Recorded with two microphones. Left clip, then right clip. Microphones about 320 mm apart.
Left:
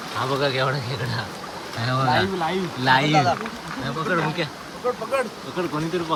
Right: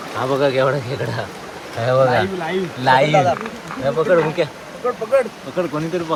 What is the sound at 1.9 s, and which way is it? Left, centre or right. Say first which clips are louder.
Speech: right 6 dB; right.